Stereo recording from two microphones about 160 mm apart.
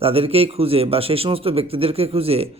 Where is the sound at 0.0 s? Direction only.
35° right (ahead or behind).